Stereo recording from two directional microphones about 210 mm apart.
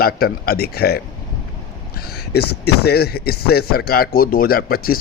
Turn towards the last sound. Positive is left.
turn(degrees=45)  # may be behind; listen again after turning